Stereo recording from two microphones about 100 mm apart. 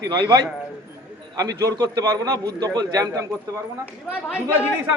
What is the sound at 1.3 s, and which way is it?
A man's voice, 35° right (ahead or behind).